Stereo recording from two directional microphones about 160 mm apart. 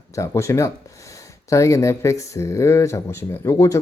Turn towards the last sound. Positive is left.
turn(degrees=20)  # may be behind; listen again after turning